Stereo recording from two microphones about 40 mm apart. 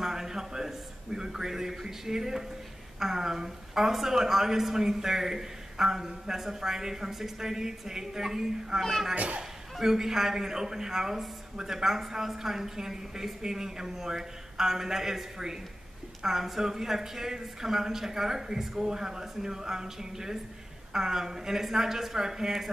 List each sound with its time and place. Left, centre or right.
0.0 s a man's voice: centre
9.1 s speech: right
9.8 s a woman's voice: centre